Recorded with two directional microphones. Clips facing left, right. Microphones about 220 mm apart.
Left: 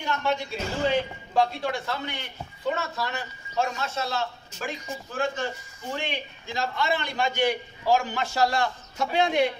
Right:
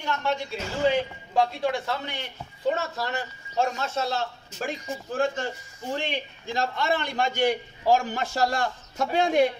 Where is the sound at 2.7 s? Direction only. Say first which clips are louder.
Right 1 dB; 30° right (ahead or behind).